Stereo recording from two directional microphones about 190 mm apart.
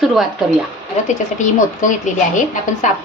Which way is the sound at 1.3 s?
40° left (ahead or behind).